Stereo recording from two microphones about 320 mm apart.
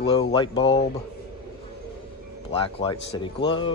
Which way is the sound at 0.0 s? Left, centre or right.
Centre.